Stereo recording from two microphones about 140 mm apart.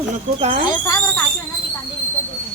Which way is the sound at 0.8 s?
25° left (ahead or behind).